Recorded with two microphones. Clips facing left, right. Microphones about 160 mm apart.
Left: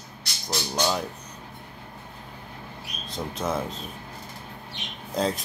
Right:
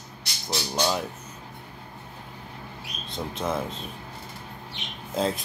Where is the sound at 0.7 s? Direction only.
Centre (ahead or behind).